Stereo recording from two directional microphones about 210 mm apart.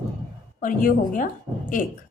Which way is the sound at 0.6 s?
40° left (ahead or behind).